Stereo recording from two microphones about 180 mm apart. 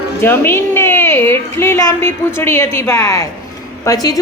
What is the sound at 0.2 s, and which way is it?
A woman's voice, 10° left (ahead or behind).